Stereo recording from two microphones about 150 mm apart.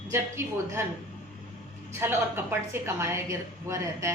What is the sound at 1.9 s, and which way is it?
Speech, 15° right (ahead or behind).